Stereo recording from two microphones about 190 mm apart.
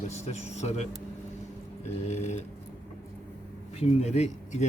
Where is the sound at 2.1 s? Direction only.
35° left (ahead or behind).